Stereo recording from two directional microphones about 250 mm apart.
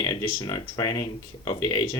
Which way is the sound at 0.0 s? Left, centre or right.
Centre.